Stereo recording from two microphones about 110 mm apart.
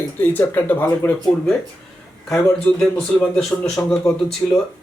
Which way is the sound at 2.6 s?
10° left (ahead or behind).